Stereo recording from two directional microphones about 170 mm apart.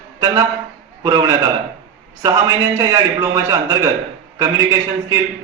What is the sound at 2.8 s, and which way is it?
A man's voice, 20° right (ahead or behind).